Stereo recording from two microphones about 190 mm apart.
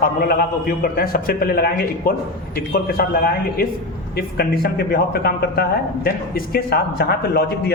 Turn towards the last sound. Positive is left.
turn(degrees=55)  # may be behind; listen again after turning